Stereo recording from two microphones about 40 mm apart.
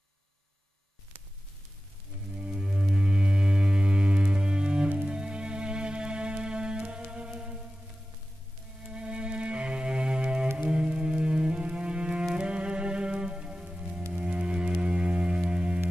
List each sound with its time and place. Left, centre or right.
2.3 s music: right
8.8 s music: right